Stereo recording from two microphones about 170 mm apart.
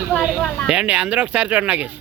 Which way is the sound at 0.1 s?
5° left (ahead or behind).